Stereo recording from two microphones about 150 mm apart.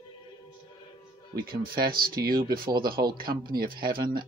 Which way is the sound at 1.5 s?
80° right.